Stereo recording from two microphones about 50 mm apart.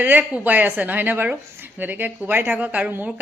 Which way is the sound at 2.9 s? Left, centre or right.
Right.